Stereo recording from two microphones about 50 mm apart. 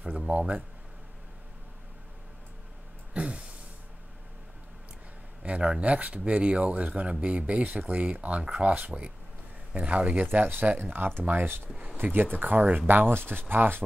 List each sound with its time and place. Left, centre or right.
0.3 s speech: right
3.1 s a sound: right
5.4 s speech: right
10.3 s speech: right
12.0 s speech: right